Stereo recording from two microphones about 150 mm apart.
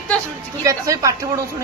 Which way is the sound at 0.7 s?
20° right (ahead or behind).